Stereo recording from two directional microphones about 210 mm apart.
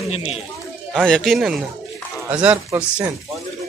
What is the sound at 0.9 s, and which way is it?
Speech, 5° left (ahead or behind).